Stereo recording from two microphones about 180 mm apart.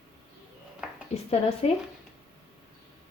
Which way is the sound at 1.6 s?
35° left (ahead or behind).